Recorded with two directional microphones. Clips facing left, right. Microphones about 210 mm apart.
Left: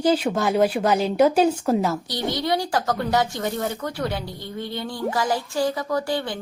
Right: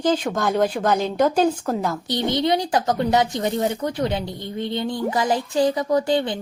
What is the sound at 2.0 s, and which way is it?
A woman's voice, 20° right (ahead or behind).